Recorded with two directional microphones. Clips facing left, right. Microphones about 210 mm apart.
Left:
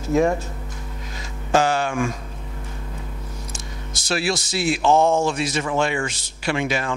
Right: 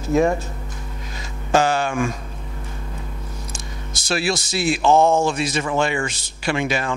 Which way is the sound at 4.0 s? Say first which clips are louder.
Right 1 dB; 5° right (ahead or behind).